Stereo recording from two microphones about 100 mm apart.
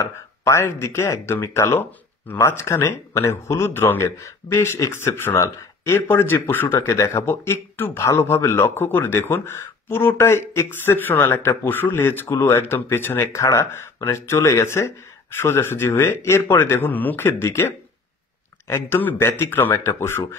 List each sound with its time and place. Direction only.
0.0 s speech: 25° left (ahead or behind)